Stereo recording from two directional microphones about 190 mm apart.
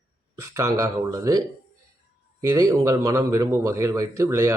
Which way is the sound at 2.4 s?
15° right (ahead or behind).